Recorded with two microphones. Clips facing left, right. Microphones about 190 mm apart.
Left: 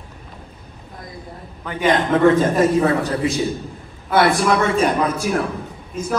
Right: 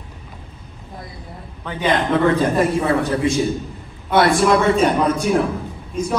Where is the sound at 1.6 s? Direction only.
10° left (ahead or behind).